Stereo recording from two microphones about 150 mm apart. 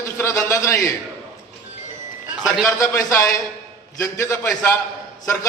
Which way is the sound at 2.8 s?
20° left (ahead or behind).